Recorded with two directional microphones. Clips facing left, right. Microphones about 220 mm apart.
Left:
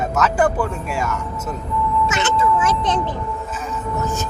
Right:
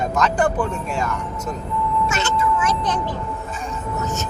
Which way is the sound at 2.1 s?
20° left (ahead or behind).